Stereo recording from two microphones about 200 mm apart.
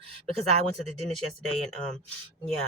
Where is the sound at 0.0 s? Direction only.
30° right (ahead or behind).